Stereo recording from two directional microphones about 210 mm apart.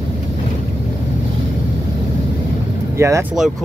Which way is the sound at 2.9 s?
15° right (ahead or behind).